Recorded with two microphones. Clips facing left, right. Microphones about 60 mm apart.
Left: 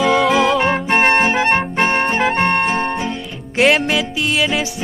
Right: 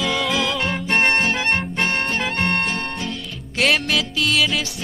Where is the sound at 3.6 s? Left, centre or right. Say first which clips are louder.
Left 5 dB; centre.